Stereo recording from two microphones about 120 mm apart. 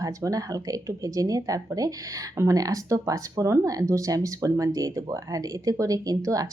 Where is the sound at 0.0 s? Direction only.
30° right (ahead or behind).